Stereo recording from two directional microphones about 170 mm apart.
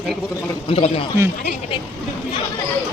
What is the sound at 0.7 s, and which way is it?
Speech, 35° left (ahead or behind).